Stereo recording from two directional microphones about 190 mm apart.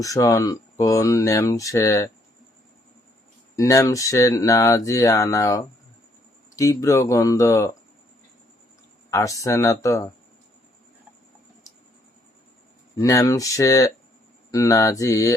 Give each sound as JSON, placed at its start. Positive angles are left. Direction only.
{"t": 0.0, "sound": "speech", "side_deg": 15}
{"t": 3.5, "sound": "speech", "side_deg": 15}
{"t": 9.0, "sound": "speech", "side_deg": 15}
{"t": 13.0, "sound": "speech", "side_deg": 15}